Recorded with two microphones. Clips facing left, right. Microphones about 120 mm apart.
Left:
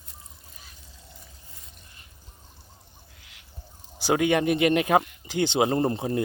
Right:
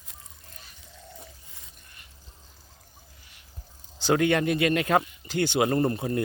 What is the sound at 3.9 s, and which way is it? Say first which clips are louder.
Speech: even; 15° left (ahead or behind).